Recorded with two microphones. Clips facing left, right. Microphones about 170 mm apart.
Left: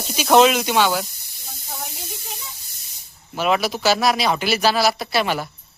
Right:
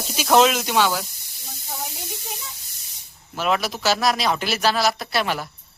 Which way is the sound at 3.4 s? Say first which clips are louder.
Left 3 dB; 5° left (ahead or behind).